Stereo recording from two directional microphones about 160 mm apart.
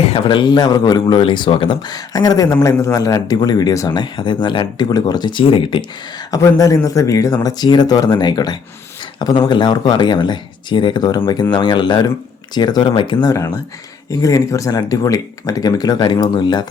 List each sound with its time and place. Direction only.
0.0 s speech: 35° left (ahead or behind)